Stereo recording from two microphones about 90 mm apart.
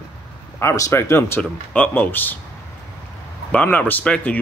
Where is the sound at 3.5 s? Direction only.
15° left (ahead or behind).